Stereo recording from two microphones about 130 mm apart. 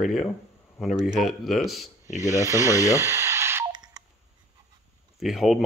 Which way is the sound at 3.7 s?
30° right (ahead or behind).